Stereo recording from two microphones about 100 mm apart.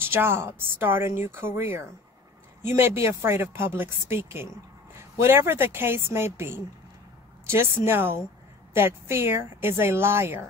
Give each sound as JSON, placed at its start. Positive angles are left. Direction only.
{"t": 0.0, "sound": "speech", "side_deg": -20}